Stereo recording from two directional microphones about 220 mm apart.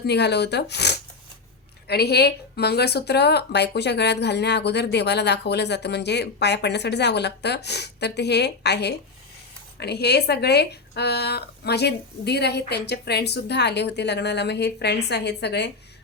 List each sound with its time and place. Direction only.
0.0 s a woman's voice: 50° left (ahead or behind)